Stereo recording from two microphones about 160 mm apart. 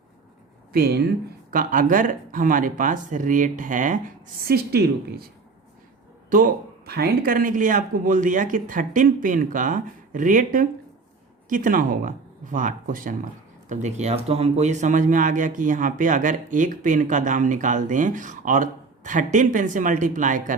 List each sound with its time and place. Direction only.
0.7 s speech: 75° right (ahead or behind)
1.5 s speech: 60° right (ahead or behind)
4.4 s a woman's voice: 85° right
6.3 s speech: 70° right (ahead or behind); by 20.6 s 55° right (ahead or behind)